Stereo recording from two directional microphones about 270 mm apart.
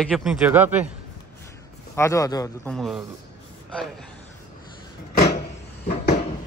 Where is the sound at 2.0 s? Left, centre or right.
Centre.